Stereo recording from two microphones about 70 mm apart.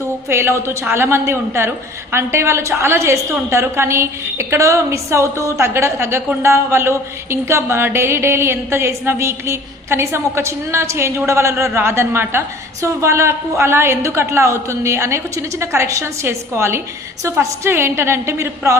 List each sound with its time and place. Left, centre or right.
0.3 s a woman's voice: right